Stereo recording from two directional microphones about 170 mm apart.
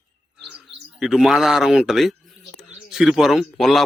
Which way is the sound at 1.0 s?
Centre (ahead or behind).